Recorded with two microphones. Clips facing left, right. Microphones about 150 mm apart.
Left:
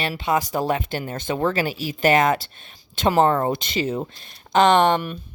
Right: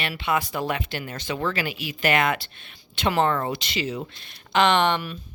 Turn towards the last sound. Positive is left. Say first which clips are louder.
# left 4 dB
turn(degrees=45)  # may be behind; listen again after turning